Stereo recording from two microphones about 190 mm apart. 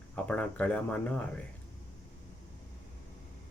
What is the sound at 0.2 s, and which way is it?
Speech, 5° left (ahead or behind).